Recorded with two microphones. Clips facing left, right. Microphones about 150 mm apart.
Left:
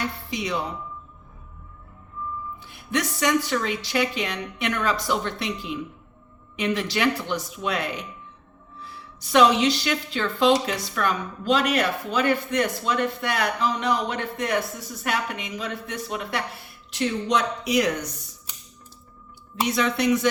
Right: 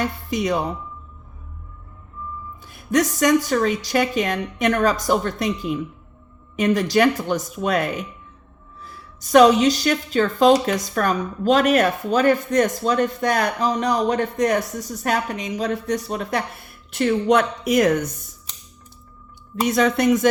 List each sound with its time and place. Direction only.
0.0 s speech: 45° right (ahead or behind)
2.6 s a woman's voice: 45° right (ahead or behind)
16.9 s a woman's voice: 55° right (ahead or behind)
19.6 s a woman's voice: 45° right (ahead or behind)